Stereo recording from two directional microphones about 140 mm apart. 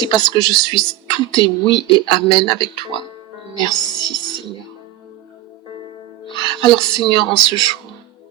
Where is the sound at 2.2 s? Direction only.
35° right (ahead or behind).